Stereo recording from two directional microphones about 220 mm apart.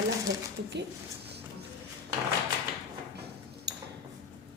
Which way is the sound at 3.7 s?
50° right (ahead or behind).